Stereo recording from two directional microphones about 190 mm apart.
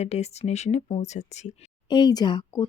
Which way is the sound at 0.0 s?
35° left (ahead or behind).